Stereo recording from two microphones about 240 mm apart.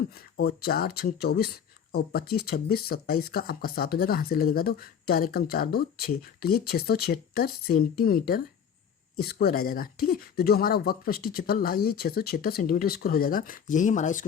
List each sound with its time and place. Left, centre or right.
0.1 s speech: left